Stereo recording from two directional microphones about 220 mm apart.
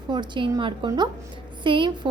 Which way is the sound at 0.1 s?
20° right (ahead or behind).